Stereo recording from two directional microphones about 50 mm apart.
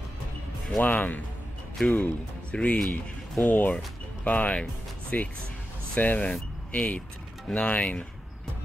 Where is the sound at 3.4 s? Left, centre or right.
Left.